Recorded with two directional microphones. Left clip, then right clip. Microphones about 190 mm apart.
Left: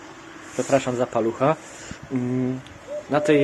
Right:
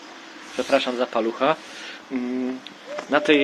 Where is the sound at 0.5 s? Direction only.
15° left (ahead or behind).